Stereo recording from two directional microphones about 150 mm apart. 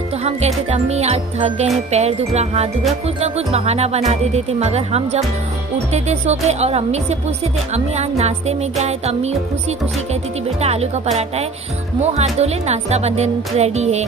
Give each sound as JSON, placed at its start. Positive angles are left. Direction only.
{"t": 0.7, "sound": "speech", "side_deg": -45}
{"t": 10.6, "sound": "speech", "side_deg": -45}
{"t": 12.0, "sound": "speech", "side_deg": -45}